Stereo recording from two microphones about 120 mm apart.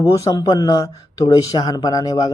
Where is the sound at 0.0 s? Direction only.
30° left (ahead or behind).